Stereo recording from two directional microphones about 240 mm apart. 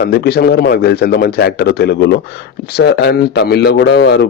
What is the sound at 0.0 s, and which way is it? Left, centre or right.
Speech, left.